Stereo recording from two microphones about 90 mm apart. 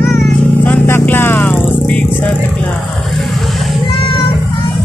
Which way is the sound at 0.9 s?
25° left (ahead or behind).